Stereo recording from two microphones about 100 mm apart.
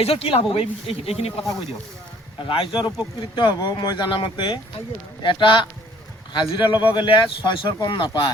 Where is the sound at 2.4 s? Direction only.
55° left (ahead or behind).